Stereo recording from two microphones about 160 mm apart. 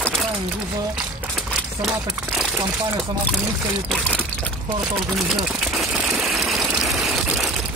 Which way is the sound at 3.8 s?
5° left (ahead or behind).